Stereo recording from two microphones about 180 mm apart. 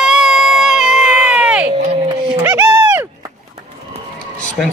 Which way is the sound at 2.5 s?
10° right (ahead or behind).